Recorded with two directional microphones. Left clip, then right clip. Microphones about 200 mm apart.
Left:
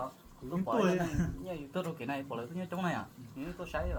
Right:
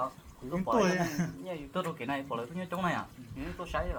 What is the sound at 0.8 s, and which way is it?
Speech, 30° right (ahead or behind).